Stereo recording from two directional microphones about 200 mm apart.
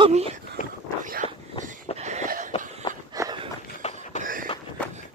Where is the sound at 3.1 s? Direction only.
15° right (ahead or behind).